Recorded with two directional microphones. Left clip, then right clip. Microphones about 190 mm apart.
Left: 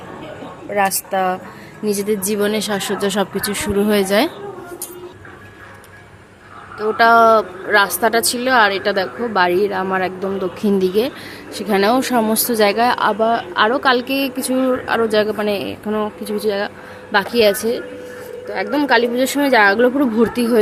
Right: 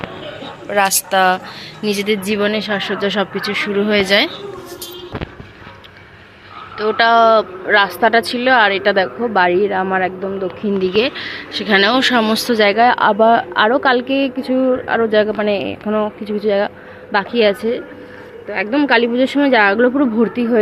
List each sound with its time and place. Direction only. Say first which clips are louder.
0.7 s a woman's voice: right 3 dB; 5° right (ahead or behind)
1.8 s speech: right 1 dB; 10° left (ahead or behind)
6.7 s a woman's voice: even; 5° left (ahead or behind)
10.6 s a woman's voice: right 1 dB; 25° left (ahead or behind)